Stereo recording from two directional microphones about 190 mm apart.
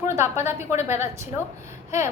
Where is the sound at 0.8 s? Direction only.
35° left (ahead or behind).